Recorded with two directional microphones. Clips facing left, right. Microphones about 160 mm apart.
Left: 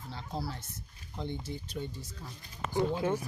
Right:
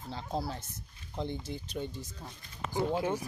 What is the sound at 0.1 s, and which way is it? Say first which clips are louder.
Speech: right 3 dB; 20° right (ahead or behind).